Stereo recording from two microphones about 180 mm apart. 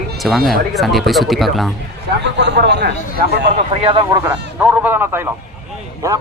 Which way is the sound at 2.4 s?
75° right (ahead or behind).